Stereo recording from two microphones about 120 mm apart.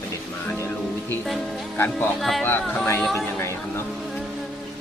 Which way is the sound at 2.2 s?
Centre (ahead or behind).